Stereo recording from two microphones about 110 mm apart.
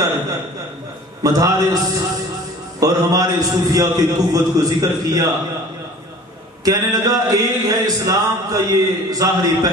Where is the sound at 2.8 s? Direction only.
35° right (ahead or behind).